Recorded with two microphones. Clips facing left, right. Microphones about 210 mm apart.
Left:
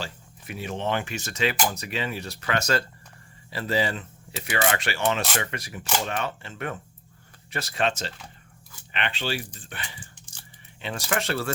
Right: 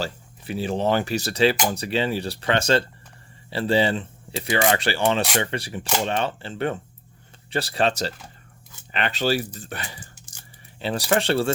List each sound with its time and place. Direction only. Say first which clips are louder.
0.0 s speech: right 7 dB; 30° right (ahead or behind)